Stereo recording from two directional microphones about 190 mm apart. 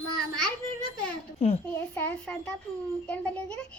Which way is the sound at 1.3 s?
30° left (ahead or behind).